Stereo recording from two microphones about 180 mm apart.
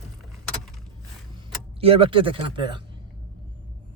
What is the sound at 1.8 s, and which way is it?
Speech, 30° right (ahead or behind).